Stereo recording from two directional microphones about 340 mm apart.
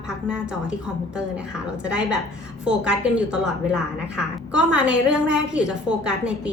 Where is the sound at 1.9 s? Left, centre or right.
Centre.